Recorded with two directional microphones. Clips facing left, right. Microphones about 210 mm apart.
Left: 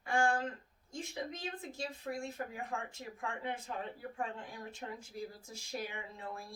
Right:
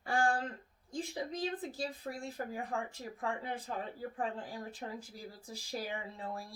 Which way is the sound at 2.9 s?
35° right (ahead or behind).